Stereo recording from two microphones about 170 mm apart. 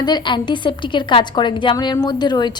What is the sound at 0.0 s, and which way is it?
A woman's voice, 25° left (ahead or behind).